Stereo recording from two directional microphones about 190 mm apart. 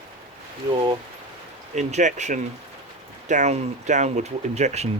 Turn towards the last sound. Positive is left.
turn(degrees=-35)  # may be behind; listen again after turning